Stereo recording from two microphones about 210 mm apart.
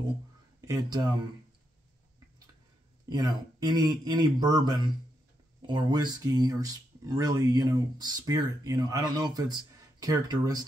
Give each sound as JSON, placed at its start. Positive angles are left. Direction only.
{"t": 0.6, "sound": "speech", "side_deg": -15}
{"t": 3.1, "sound": "speech", "side_deg": -20}